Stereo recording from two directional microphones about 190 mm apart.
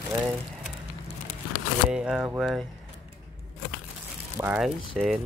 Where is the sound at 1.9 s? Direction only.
5° right (ahead or behind).